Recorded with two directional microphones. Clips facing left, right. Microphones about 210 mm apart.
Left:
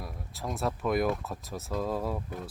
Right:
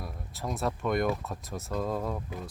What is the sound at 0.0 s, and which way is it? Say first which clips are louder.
Speech: right 1 dB; centre (ahead or behind).